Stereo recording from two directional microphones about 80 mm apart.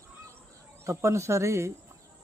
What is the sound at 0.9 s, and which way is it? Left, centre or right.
Speech, right.